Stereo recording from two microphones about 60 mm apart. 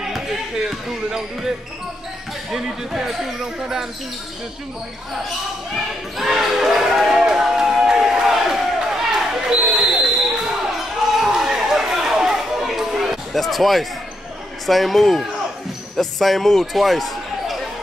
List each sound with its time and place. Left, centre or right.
0.0 s basketball bounce: centre
2.5 s speech: centre
6.1 s a sound: centre
14.7 s speech: centre